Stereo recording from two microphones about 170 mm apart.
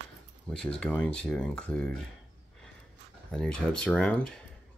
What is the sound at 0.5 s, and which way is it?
Speech, 5° left (ahead or behind).